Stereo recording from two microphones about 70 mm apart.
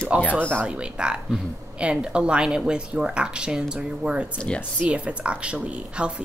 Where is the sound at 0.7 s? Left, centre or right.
Centre.